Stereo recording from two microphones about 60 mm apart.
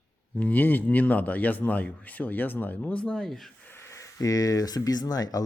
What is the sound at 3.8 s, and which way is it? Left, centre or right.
Speech, left.